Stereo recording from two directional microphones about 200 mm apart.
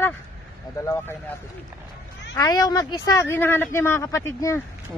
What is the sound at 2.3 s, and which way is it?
Speech, 20° left (ahead or behind).